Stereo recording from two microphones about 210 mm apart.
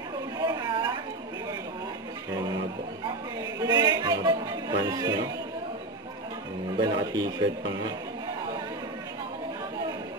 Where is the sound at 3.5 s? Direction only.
20° right (ahead or behind).